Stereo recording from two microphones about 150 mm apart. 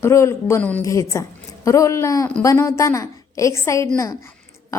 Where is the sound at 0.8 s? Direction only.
20° left (ahead or behind).